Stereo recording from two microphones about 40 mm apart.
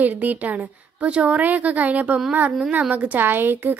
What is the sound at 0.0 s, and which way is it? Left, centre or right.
A woman's voice, right.